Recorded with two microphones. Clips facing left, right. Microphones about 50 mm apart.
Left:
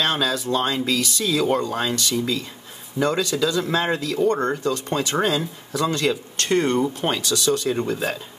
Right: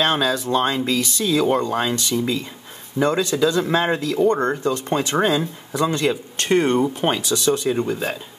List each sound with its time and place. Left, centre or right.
0.0 s speech: right
1.7 s speech: centre
7.7 s speech: centre